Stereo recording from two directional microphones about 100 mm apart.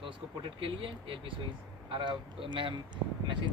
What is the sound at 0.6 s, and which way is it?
Speech, 65° right (ahead or behind).